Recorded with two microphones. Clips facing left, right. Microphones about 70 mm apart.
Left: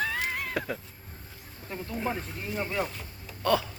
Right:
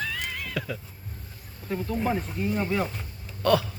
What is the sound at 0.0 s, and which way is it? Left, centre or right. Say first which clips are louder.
Cat: left 2 dB; left.